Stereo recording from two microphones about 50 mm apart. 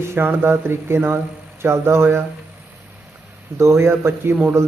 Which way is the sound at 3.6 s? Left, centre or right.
Right.